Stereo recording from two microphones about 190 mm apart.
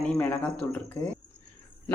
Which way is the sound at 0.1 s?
10° left (ahead or behind).